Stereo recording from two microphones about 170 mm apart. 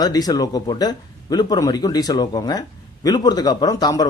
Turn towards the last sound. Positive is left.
turn(degrees=20)  # may be behind; listen again after turning